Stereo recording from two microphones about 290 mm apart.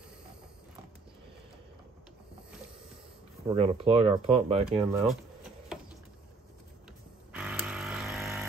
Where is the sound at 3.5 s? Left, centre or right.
Centre.